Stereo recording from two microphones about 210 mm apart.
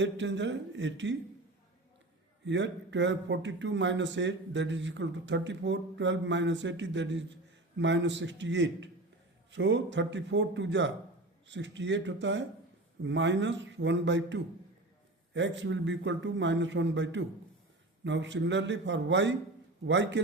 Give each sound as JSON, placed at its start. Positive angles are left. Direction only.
{"t": 0.0, "sound": "a man's voice", "side_deg": -60}
{"t": 2.4, "sound": "a man's voice", "side_deg": -60}